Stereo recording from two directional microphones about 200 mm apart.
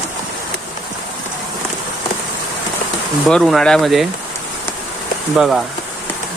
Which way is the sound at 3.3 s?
Centre (ahead or behind).